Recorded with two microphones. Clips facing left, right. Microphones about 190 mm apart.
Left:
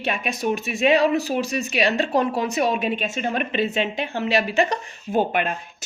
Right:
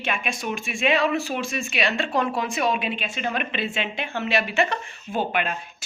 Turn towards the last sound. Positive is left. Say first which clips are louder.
# left 4 dB
turn(degrees=45)  # may be behind; listen again after turning